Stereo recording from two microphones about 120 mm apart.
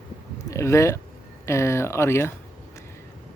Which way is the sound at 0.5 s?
25° left (ahead or behind).